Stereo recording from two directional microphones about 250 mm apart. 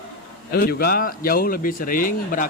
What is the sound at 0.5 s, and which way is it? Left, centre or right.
Speech, left.